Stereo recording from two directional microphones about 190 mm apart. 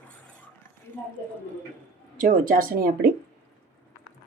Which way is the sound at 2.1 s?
45° right (ahead or behind).